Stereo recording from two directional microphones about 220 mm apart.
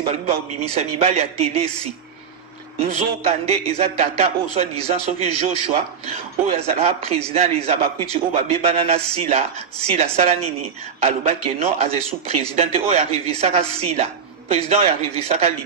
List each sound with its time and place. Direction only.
0.0 s speech: 25° right (ahead or behind)